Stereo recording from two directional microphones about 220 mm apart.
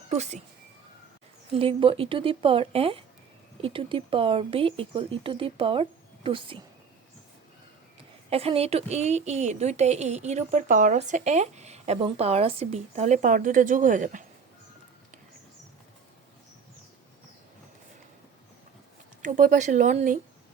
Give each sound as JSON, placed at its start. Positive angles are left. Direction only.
{"t": 0.1, "sound": "speech", "side_deg": -30}
{"t": 1.5, "sound": "speech", "side_deg": -25}
{"t": 8.3, "sound": "a woman's voice", "side_deg": -25}
{"t": 19.2, "sound": "a woman's voice", "side_deg": -35}